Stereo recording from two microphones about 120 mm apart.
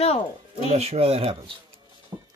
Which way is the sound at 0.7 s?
60° right (ahead or behind).